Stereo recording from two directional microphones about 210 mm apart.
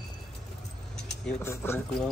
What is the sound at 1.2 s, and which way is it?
Speech, 10° left (ahead or behind).